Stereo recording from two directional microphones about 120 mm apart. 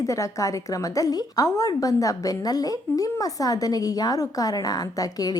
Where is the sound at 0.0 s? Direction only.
25° left (ahead or behind).